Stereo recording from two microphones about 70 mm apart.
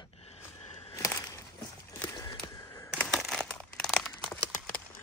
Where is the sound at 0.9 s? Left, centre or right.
Left.